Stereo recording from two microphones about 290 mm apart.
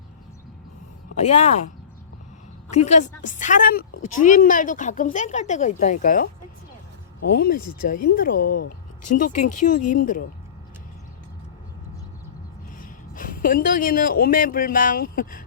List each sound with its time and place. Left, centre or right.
1.1 s speech: left
2.6 s a woman's voice: left
7.3 s speech: left
8.4 s speech: left
9.1 s speech: left
12.8 s speech: left